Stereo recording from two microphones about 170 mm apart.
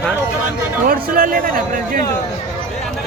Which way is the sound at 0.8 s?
55° right (ahead or behind).